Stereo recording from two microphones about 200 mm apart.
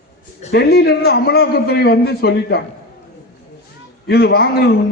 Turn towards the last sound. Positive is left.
turn(degrees=50)  # may be behind; listen again after turning